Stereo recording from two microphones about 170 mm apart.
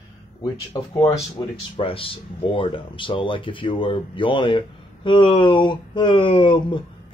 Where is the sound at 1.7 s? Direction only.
30° left (ahead or behind).